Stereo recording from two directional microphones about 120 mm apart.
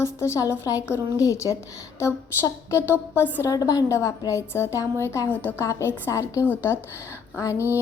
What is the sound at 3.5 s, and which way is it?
A woman's voice, 30° left (ahead or behind).